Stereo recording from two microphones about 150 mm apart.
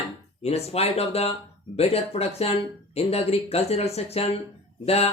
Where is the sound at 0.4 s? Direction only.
45° left (ahead or behind).